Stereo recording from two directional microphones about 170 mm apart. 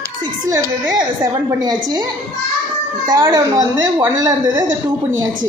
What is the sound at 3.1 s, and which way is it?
A woman's voice, 20° right (ahead or behind).